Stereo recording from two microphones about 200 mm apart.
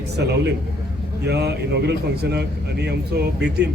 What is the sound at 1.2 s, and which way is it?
A man's voice, 55° right (ahead or behind).